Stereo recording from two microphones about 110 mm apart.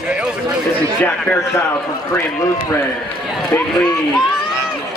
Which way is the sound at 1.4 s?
25° left (ahead or behind).